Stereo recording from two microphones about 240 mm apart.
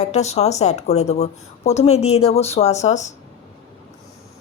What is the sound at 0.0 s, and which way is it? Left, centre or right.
A woman's voice, left.